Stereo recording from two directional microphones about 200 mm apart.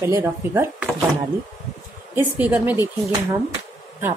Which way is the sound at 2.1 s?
10° right (ahead or behind).